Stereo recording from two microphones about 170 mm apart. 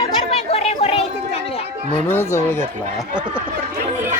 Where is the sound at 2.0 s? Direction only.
15° left (ahead or behind).